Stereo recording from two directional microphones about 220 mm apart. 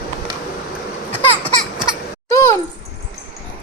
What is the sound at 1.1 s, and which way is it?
Baby laughter, 5° left (ahead or behind).